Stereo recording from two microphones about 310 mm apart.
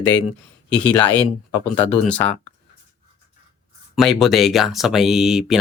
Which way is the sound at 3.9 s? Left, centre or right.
Centre.